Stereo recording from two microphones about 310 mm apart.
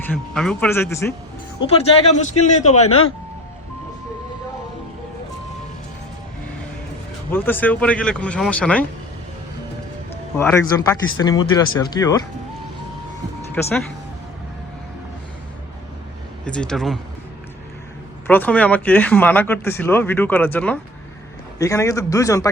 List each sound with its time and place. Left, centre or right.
0.0 s speech: centre
1.7 s a man's voice: left
2.8 s speech: left
7.3 s speech: centre
10.3 s speech: centre
16.5 s speech: centre
18.3 s speech: centre